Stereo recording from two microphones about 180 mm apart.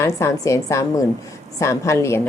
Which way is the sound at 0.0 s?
15° left (ahead or behind).